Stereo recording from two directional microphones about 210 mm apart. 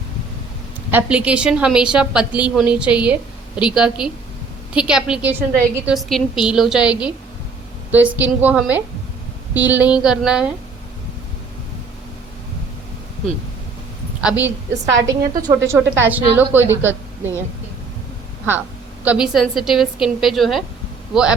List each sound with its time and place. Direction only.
0.9 s a woman's voice: 5° right (ahead or behind)
8.1 s a woman's voice: 10° right (ahead or behind)
14.2 s a woman's voice: 5° right (ahead or behind)
15.0 s a woman's voice: 15° right (ahead or behind)
19.0 s a woman's voice: 5° right (ahead or behind)